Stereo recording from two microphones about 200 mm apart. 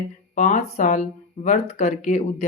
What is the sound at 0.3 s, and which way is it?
Speech, 35° left (ahead or behind).